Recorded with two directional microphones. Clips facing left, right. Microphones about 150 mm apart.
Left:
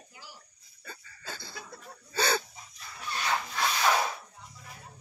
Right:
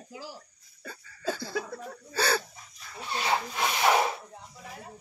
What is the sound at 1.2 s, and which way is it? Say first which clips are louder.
Laughter: right 13 dB; 90° right.